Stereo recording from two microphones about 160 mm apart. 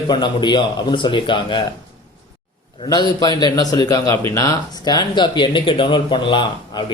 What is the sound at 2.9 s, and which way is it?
A man's voice, 25° left (ahead or behind).